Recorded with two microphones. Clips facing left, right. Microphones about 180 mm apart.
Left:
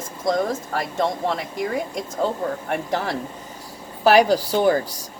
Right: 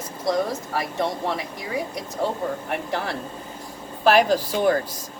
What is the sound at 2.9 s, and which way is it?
Speech, 45° left (ahead or behind).